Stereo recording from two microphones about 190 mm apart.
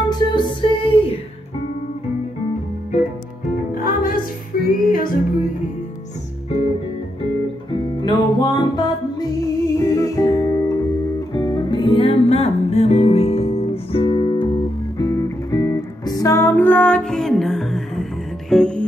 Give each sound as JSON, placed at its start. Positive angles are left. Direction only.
{"t": 0.0, "sound": "music", "side_deg": 25}
{"t": 3.7, "sound": "music", "side_deg": 45}
{"t": 6.5, "sound": "music", "side_deg": 35}
{"t": 7.7, "sound": "music", "side_deg": 25}